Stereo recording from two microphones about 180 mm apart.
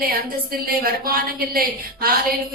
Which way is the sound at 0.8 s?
55° right (ahead or behind).